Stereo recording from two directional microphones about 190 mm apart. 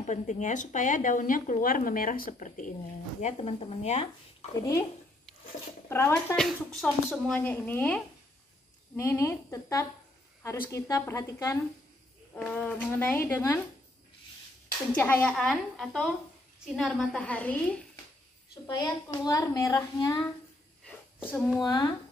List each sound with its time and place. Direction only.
0.0 s speech: 40° left (ahead or behind)
5.9 s speech: 15° left (ahead or behind)
6.3 s speech: centre (ahead or behind)
14.9 s a woman's voice: 10° left (ahead or behind)
18.7 s speech: 20° left (ahead or behind)
20.8 s a sound: 5° left (ahead or behind)
21.6 s speech: 20° left (ahead or behind)